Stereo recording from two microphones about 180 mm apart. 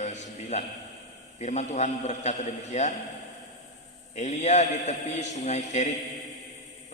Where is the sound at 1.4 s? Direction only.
40° left (ahead or behind).